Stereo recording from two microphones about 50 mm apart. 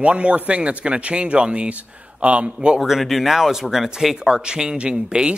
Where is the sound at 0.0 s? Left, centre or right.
Right.